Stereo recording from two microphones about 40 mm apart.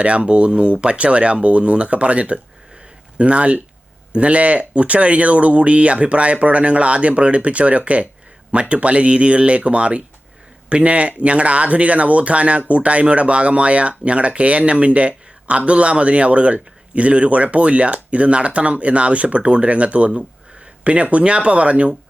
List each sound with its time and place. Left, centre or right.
0.0 s speech: right